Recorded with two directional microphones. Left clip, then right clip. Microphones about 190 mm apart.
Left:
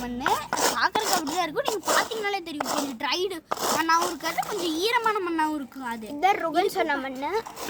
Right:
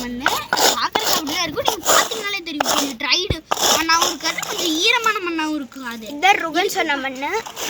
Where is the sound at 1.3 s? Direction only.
50° left (ahead or behind).